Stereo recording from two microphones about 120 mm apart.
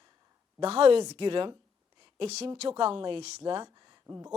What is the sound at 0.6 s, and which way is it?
Speech, 60° right (ahead or behind).